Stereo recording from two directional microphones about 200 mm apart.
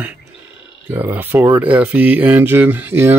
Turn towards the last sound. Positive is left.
turn(degrees=-10)  # may be behind; listen again after turning